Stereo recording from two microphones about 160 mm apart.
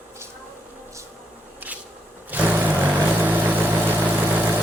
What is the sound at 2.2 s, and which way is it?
Vehicle, 10° right (ahead or behind).